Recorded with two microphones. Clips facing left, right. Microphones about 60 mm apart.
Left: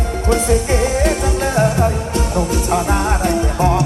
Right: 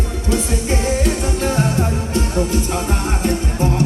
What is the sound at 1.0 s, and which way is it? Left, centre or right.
Music, left.